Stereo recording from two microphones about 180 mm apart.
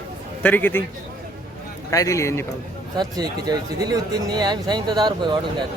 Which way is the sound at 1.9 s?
15° left (ahead or behind).